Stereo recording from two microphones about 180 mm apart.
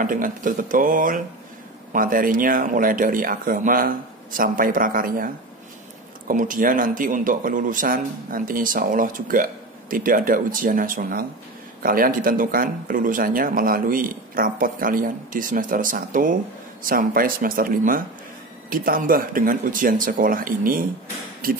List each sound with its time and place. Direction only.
0.0 s speech: 50° right (ahead or behind)